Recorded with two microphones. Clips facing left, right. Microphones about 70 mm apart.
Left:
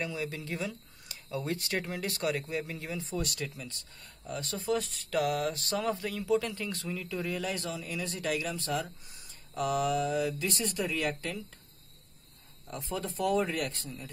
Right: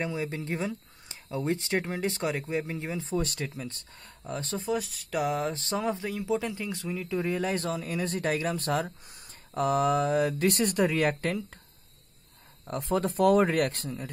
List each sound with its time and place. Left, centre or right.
0.0 s speech: right
4.7 s speech: centre
5.1 s speech: right
12.6 s speech: right